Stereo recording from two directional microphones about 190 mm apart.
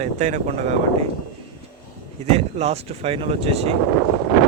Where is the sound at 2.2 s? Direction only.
35° right (ahead or behind).